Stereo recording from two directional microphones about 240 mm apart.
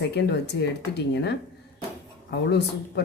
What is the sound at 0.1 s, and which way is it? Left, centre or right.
Speech, left.